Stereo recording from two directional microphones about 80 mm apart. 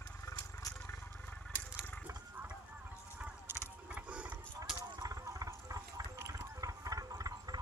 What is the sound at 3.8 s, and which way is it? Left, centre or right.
Mechanisms, centre.